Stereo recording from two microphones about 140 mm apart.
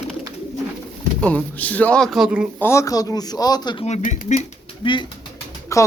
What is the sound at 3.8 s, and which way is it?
Speech, 55° left (ahead or behind).